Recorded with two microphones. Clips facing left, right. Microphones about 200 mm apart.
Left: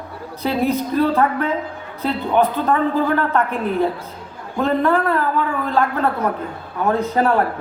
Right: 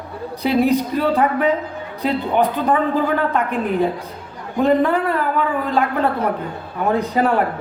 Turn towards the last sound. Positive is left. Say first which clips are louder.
# even
turn(degrees=-15)  # may be behind; listen again after turning